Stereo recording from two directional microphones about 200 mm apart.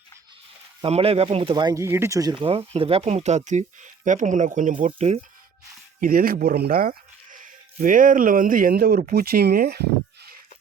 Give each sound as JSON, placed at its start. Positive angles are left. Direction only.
{"t": 0.8, "sound": "speech", "side_deg": -30}
{"t": 6.0, "sound": "speech", "side_deg": -45}